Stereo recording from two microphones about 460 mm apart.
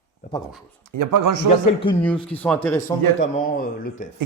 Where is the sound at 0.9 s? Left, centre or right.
Right.